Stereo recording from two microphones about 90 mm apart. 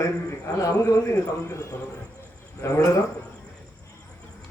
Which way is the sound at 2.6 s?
30° left (ahead or behind).